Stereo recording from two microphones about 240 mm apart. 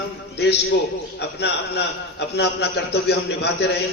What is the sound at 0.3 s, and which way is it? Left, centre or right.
A man's voice, left.